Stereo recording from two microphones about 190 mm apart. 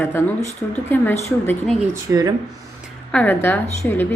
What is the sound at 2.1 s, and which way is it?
Speech, 20° right (ahead or behind).